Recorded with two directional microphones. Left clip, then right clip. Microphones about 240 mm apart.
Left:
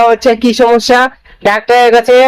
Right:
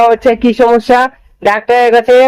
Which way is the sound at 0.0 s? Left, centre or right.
Centre.